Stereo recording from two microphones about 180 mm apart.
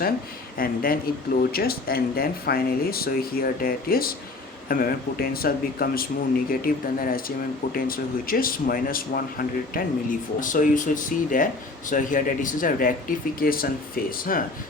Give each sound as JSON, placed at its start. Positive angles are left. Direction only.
{"t": 0.6, "sound": "speech", "side_deg": 55}